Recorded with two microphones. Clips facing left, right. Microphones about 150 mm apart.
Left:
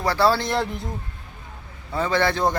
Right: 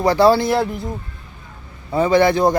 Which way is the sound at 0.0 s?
15° right (ahead or behind).